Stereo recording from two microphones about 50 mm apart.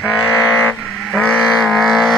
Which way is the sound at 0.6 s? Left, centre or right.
Left.